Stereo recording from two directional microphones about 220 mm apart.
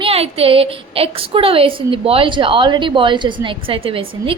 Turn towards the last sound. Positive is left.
turn(degrees=-25)  # may be behind; listen again after turning